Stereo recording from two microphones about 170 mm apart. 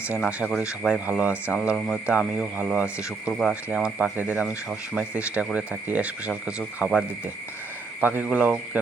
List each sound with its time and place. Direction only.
0.2 s speech: 5° right (ahead or behind)
8.0 s speech: 10° right (ahead or behind)